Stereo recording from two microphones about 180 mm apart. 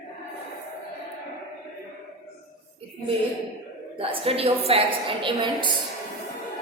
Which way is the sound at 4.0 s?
30° right (ahead or behind).